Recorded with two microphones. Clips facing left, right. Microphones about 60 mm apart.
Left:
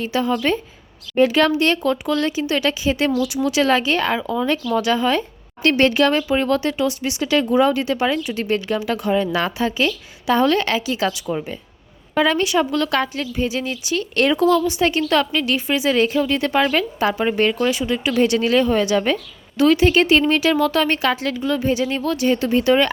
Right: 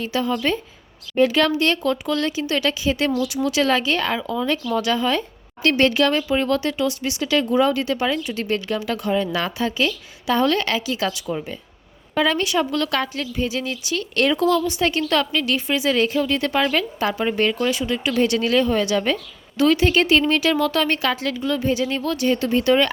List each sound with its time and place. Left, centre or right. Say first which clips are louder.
0.0 s a woman's voice: left 2 dB; left
12.9 s a woman's voice: left 3 dB; left
19.5 s speech: left 2 dB; centre